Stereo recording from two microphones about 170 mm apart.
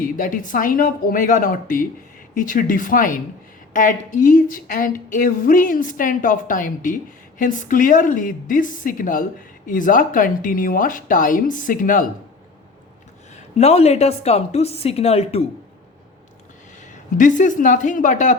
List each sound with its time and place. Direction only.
0.0 s speech: 50° left (ahead or behind)
13.3 s a woman's voice: 40° left (ahead or behind)
16.8 s speech: 45° left (ahead or behind)